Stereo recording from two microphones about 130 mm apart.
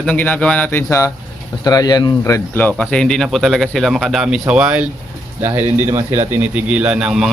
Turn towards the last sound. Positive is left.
turn(degrees=-5)  # may be behind; listen again after turning